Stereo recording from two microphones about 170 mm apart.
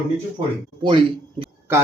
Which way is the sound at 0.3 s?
30° right (ahead or behind).